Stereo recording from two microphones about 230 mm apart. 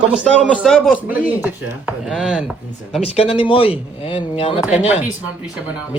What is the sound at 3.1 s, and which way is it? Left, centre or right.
Speech, left.